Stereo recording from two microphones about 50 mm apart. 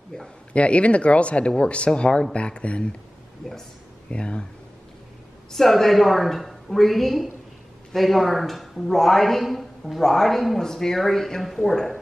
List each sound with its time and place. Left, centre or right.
0.1 s speech: centre
4.1 s speech: left
5.5 s speech: centre